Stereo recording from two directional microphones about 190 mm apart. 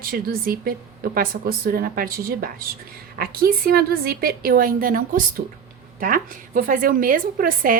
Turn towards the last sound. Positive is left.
turn(degrees=-50)  # may be behind; listen again after turning